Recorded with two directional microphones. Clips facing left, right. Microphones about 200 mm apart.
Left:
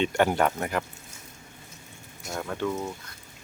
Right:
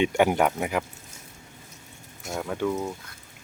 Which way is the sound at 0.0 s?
10° right (ahead or behind).